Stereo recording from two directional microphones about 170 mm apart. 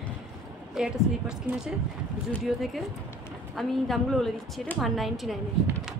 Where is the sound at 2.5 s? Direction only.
5° right (ahead or behind).